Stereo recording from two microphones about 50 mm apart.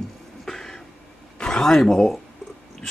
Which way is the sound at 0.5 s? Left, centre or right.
Centre.